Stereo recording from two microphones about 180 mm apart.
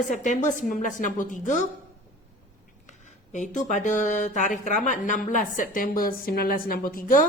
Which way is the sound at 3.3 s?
45° left (ahead or behind).